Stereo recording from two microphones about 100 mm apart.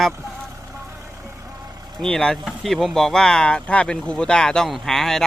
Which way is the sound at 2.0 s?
5° left (ahead or behind).